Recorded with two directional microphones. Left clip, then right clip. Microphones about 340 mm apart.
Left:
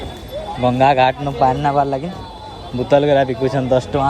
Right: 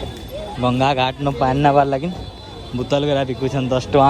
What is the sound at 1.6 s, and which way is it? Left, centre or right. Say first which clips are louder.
Speech: right 2 dB; right.